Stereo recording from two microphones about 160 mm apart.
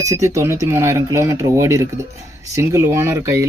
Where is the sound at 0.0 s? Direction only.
20° right (ahead or behind).